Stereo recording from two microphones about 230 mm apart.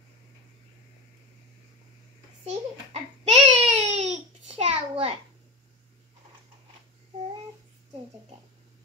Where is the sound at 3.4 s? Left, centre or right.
Right.